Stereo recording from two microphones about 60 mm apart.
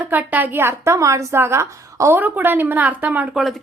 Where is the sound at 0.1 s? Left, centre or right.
Right.